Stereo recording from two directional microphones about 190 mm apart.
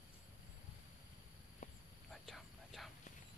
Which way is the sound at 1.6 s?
40° left (ahead or behind).